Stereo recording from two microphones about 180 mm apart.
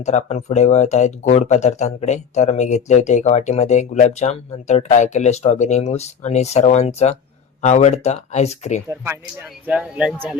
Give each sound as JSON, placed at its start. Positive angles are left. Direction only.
{"t": 0.0, "sound": "speech", "side_deg": 40}
{"t": 8.9, "sound": "speech", "side_deg": -10}